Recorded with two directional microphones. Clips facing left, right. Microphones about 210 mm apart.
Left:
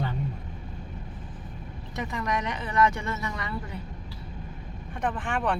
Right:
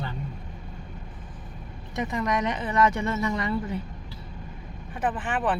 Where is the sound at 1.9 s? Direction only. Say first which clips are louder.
Right 4 dB; 20° right (ahead or behind).